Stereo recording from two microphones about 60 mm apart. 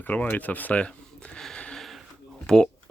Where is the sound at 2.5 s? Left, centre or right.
Centre.